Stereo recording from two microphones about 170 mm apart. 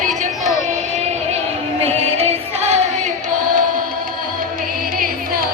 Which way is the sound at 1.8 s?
40° right (ahead or behind).